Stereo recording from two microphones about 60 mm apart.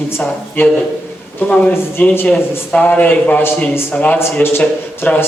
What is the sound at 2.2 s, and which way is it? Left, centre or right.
A man's voice, left.